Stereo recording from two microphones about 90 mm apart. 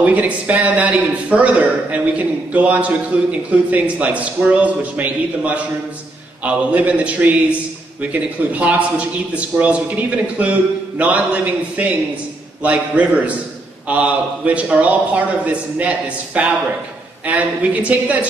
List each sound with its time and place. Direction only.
0.0 s a man's voice: 15° right (ahead or behind)